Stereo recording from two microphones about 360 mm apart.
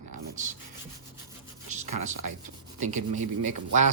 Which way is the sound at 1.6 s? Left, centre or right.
Centre.